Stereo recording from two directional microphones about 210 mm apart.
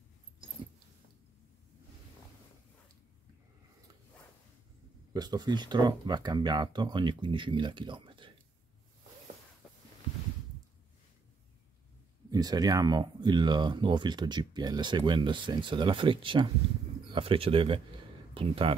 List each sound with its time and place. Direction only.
5.1 s speech: 20° right (ahead or behind)
12.3 s speech: 20° right (ahead or behind)